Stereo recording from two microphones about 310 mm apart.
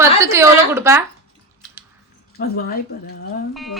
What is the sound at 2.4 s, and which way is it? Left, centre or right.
Speech, left.